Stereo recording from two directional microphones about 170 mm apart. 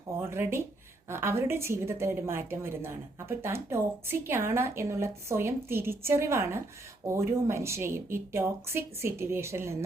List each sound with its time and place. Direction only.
0.2 s a woman's voice: 15° right (ahead or behind)